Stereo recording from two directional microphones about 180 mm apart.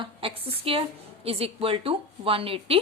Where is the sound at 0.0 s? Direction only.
30° right (ahead or behind).